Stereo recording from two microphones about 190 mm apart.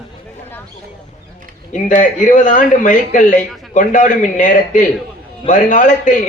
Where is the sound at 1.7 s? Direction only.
40° left (ahead or behind).